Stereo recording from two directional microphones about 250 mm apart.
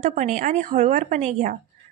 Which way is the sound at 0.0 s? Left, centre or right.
Right.